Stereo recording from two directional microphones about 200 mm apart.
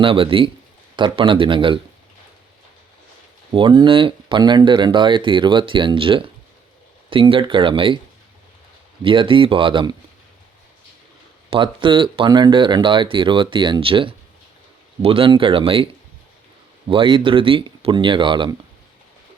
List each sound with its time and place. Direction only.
0.0 s speech: 25° right (ahead or behind)
3.5 s speech: 25° right (ahead or behind)
9.0 s speech: 25° right (ahead or behind)
11.5 s speech: 25° right (ahead or behind)
16.9 s speech: 25° right (ahead or behind)